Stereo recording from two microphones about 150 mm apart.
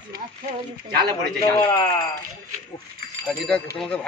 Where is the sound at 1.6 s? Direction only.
20° left (ahead or behind).